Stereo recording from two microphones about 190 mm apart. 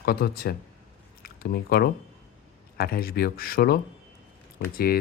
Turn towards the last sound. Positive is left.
turn(degrees=55)  # may be behind; listen again after turning